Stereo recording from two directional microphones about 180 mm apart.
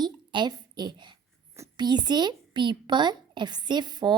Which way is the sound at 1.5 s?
20° right (ahead or behind).